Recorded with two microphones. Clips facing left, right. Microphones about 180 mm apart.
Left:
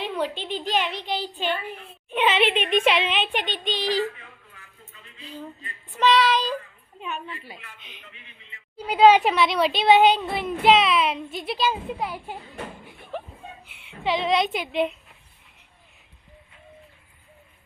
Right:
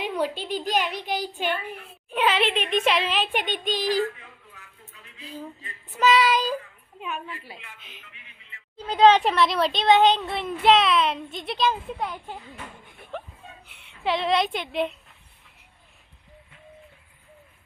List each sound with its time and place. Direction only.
0.4 s a woman's voice: 40° right (ahead or behind)
1.4 s female singing: 10° right (ahead or behind)
2.0 s a woman's voice: centre (ahead or behind)
3.7 s a woman's voice: 45° right (ahead or behind)
4.5 s a sound: centre (ahead or behind)
5.2 s female singing: 5° right (ahead or behind)
7.0 s a woman's voice: 5° right (ahead or behind)
8.1 s a woman's voice: 20° left (ahead or behind)
14.0 s a woman's voice: centre (ahead or behind)